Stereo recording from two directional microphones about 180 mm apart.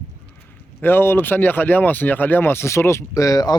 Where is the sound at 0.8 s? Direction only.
10° left (ahead or behind).